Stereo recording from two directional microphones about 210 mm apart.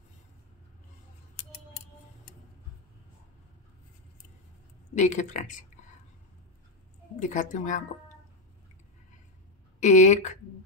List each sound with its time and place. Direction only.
4.9 s speech: 35° left (ahead or behind)
7.2 s speech: 35° left (ahead or behind)
9.8 s speech: 35° left (ahead or behind)